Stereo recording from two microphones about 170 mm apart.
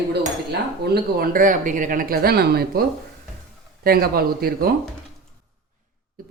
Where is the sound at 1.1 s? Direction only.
60° right (ahead or behind).